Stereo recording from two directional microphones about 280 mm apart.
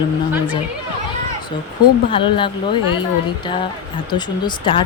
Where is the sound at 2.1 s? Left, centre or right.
Centre.